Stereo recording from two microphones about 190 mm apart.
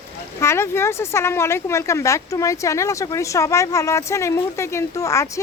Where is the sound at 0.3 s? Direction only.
15° left (ahead or behind).